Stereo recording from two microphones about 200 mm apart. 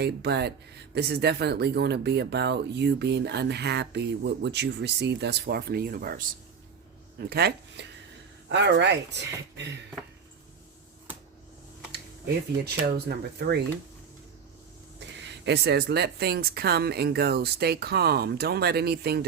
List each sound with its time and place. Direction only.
0.0 s speech: 55° right (ahead or behind)
12.6 s speech: 55° right (ahead or behind)
14.9 s speech: 60° right (ahead or behind)